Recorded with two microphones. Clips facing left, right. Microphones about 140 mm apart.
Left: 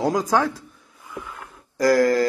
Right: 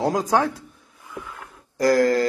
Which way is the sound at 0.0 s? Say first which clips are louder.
Even; 20° right (ahead or behind).